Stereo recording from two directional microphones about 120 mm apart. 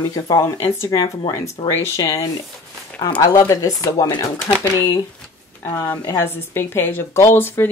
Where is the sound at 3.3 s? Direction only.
30° left (ahead or behind).